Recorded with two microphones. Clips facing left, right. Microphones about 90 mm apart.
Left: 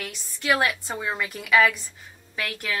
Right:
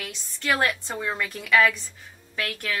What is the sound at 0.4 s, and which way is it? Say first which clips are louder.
Speech: left 1 dB; 10° left (ahead or behind).